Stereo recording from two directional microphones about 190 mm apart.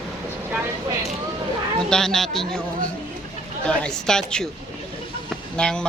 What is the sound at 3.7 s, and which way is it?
Speech, 5° left (ahead or behind).